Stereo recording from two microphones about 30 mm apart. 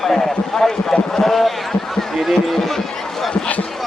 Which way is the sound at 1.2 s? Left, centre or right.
Centre.